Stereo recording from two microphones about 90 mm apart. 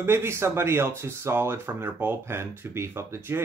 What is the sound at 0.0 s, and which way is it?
Speech, 30° right (ahead or behind).